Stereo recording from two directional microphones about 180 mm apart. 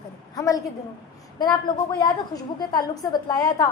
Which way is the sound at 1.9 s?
25° left (ahead or behind).